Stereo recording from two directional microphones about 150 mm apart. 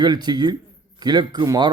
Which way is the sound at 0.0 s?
30° right (ahead or behind).